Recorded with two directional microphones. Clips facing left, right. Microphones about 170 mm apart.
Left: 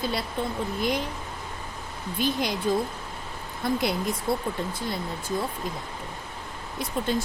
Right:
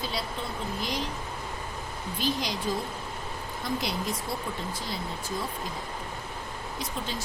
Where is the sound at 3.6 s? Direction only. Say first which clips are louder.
Left 5 dB; 55° left (ahead or behind).